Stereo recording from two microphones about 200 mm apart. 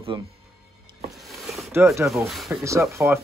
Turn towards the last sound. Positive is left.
turn(degrees=-15)  # may be behind; listen again after turning